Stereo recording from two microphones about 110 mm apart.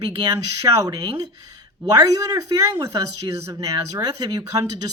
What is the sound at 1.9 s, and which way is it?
Speech, 35° right (ahead or behind).